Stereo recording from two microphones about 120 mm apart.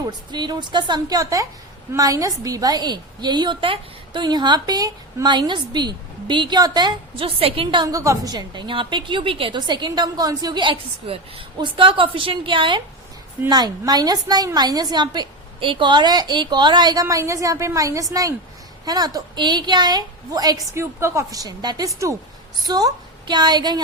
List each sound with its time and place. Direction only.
0.0 s a woman's voice: 35° right (ahead or behind)
7.9 s a woman's voice: 25° right (ahead or behind)